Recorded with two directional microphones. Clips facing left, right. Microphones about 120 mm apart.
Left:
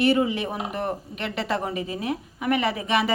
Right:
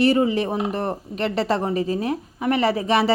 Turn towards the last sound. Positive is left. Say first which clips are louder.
# right 4 dB
turn(degrees=-35)  # may be behind; listen again after turning